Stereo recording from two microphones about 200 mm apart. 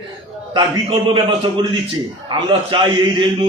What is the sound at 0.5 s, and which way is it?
A man's voice, 25° right (ahead or behind).